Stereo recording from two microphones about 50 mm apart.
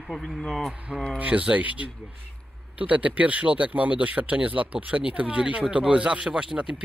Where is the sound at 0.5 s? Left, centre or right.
Centre.